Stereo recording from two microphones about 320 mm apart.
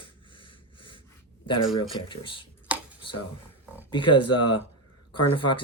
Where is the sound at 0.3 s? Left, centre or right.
Centre.